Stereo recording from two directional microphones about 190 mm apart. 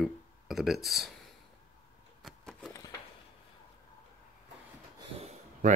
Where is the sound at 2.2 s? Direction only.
Centre (ahead or behind).